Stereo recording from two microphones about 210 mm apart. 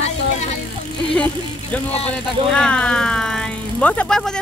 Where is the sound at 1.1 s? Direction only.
5° left (ahead or behind).